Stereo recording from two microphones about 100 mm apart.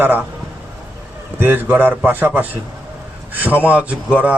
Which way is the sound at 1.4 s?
20° right (ahead or behind).